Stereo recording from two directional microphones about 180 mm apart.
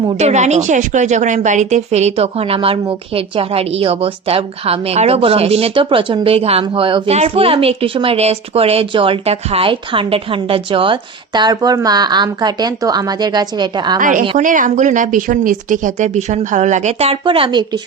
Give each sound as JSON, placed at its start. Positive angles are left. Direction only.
{"t": 0.2, "sound": "a woman's voice", "side_deg": -40}
{"t": 14.0, "sound": "a woman's voice", "side_deg": -45}